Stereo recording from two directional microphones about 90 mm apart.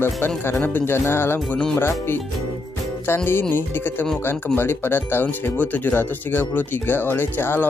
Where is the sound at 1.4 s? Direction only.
10° left (ahead or behind).